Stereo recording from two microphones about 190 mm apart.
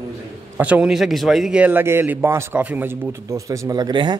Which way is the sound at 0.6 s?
5° right (ahead or behind).